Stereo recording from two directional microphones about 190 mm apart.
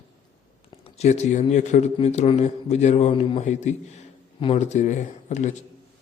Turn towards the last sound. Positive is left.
turn(degrees=40)  # may be behind; listen again after turning